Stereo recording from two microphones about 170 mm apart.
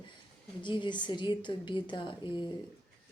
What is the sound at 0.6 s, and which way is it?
Speech, 25° left (ahead or behind).